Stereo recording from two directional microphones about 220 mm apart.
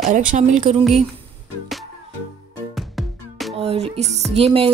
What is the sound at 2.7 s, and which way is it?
Music, centre (ahead or behind).